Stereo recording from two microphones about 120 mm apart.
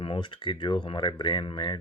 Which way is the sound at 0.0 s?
45° left (ahead or behind).